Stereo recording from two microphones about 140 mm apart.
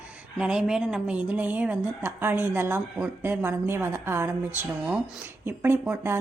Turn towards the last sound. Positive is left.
turn(degrees=-15)  # may be behind; listen again after turning